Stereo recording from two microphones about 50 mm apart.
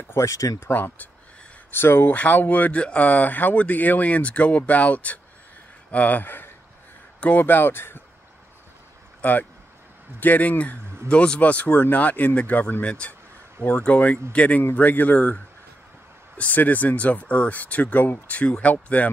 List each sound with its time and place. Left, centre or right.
0.1 s speech: left
0.7 s speech: left
2.1 s speech: left
7.2 s speech: left
7.4 s speech: left
9.2 s speech: left